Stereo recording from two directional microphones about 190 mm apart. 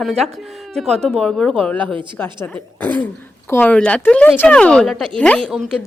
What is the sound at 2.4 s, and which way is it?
Speech, 10° left (ahead or behind).